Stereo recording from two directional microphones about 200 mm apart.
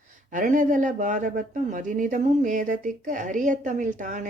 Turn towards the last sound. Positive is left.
turn(degrees=-40)  # may be behind; listen again after turning